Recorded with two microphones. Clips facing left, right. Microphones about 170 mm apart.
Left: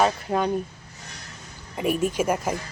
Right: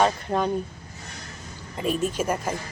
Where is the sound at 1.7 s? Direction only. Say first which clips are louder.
Left 2 dB; 10° left (ahead or behind).